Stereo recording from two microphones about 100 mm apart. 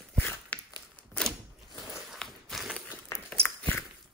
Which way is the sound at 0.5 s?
15° left (ahead or behind).